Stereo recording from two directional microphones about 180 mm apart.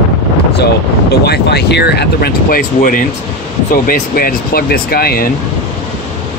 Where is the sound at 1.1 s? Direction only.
65° left (ahead or behind).